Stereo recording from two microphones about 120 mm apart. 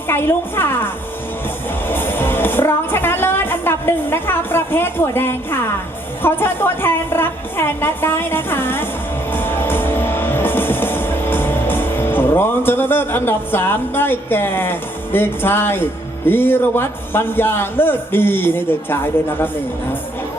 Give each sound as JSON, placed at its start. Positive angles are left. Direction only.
{"t": 0.1, "sound": "a woman's voice", "side_deg": 20}
{"t": 1.9, "sound": "a woman's voice", "side_deg": 20}
{"t": 9.3, "sound": "music", "side_deg": 20}